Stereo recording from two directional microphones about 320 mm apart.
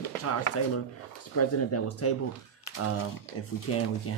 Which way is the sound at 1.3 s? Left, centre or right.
Left.